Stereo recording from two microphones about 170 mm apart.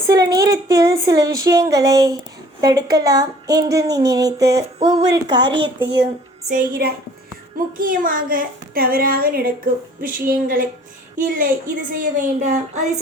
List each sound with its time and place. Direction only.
0.1 s speech: 20° right (ahead or behind)
4.8 s a sound: 30° right (ahead or behind)
5.1 s speech: 25° right (ahead or behind)
6.5 s a child's voice: 70° right (ahead or behind)
7.8 s a child's voice: 55° right (ahead or behind)